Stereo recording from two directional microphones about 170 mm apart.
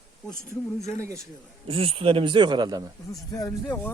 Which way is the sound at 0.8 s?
40° left (ahead or behind).